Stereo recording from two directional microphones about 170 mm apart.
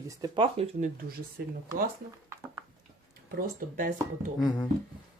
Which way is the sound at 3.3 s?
55° right (ahead or behind).